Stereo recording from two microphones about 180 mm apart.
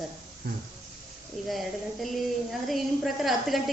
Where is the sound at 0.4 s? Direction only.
60° right (ahead or behind).